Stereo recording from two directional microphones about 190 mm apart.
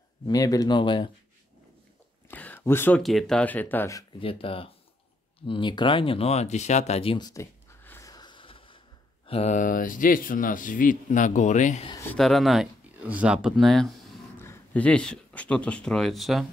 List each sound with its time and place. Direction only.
0.3 s speech: 20° left (ahead or behind)
2.2 s a sound: 10° left (ahead or behind)
3.0 s speech: centre (ahead or behind)
4.2 s speech: 30° left (ahead or behind)
7.8 s a sound: 15° left (ahead or behind)
9.3 s speech: 35° left (ahead or behind)
11.9 s speech: 10° left (ahead or behind)
12.2 s speech: centre (ahead or behind)
14.4 s speech: 10° left (ahead or behind)